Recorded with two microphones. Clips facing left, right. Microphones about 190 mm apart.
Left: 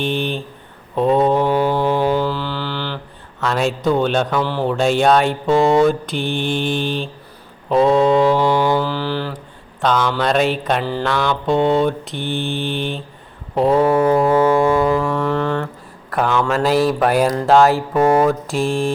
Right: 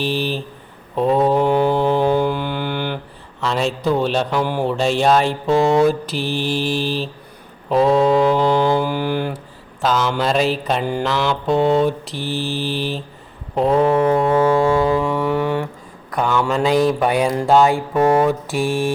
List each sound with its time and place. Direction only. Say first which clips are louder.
0.0 s mantra: even; 5° right (ahead or behind)
2.1 s mantra: right 1 dB; 15° right (ahead or behind)
3.4 s mantra: left 1 dB; centre (ahead or behind)
8.8 s mantra: right 1 dB; 15° right (ahead or behind)
9.8 s mantra: left 1 dB; 5° right (ahead or behind)
14.8 s music: left 1 dB; 10° right (ahead or behind)
15.1 s mantra: even; 10° right (ahead or behind)
16.1 s mantra: left 1 dB; 5° left (ahead or behind)
16.4 s mantra: left 1 dB; 10° right (ahead or behind)
16.6 s mantra: even; 5° left (ahead or behind)